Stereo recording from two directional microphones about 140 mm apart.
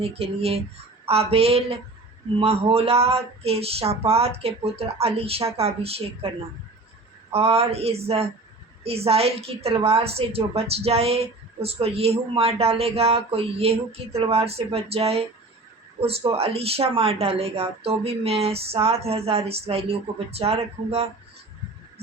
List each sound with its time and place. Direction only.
0.0 s speech: 45° right (ahead or behind)
7.3 s speech: 45° right (ahead or behind)